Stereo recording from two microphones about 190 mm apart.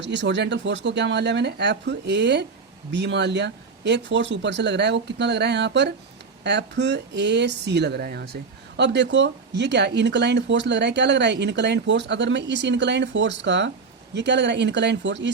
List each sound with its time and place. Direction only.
0.0 s speech: 65° right (ahead or behind)